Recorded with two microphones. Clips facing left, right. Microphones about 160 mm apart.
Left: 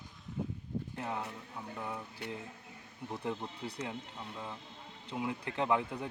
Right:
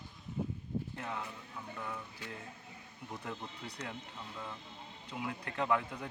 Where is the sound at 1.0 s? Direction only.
30° left (ahead or behind).